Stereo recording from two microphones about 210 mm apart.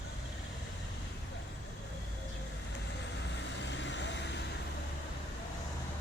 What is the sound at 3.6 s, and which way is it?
Vehicle, 60° left (ahead or behind).